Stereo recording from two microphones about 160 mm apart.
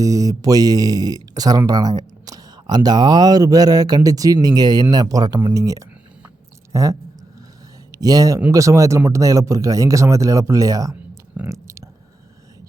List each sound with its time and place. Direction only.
0.0 s speech: 20° right (ahead or behind)
7.9 s speech: 20° right (ahead or behind)
11.3 s a sound: 20° right (ahead or behind)